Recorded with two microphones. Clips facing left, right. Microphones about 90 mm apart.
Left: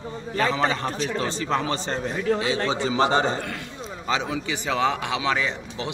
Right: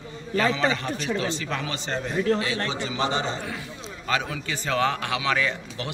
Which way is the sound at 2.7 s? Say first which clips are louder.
Left 5 dB; 35° left (ahead or behind).